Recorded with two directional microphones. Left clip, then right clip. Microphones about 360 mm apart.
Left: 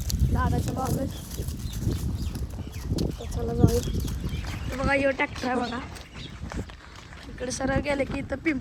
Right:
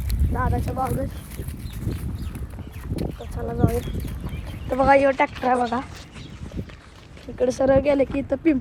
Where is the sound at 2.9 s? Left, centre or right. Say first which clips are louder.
Right 1 dB; centre.